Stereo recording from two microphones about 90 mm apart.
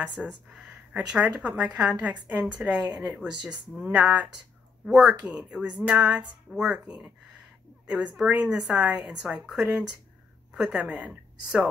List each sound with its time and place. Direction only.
0.1 s a woman's voice: 10° right (ahead or behind)